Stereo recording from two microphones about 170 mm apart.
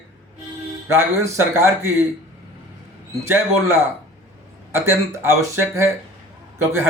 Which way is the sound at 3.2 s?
15° right (ahead or behind).